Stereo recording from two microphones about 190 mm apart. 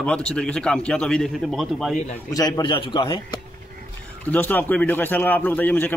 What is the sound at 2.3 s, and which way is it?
A man's voice, 20° left (ahead or behind).